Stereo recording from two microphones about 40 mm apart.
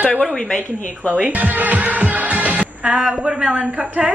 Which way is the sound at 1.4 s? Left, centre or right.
Right.